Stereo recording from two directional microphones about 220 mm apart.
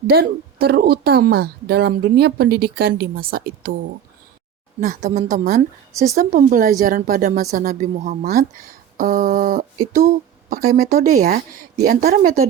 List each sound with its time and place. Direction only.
0.1 s a woman's voice: 45° right (ahead or behind)
4.8 s a woman's voice: 35° right (ahead or behind)